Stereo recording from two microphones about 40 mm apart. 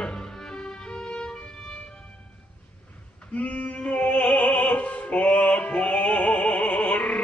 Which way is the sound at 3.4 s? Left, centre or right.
Left.